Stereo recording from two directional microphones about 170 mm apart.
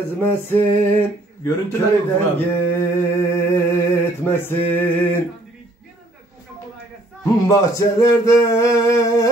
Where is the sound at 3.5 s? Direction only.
15° left (ahead or behind).